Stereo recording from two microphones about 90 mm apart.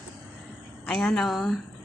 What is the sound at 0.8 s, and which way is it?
Speech, 10° left (ahead or behind).